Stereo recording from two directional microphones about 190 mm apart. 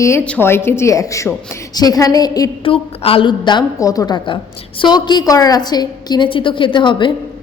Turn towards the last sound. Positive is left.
turn(degrees=25)  # may be behind; listen again after turning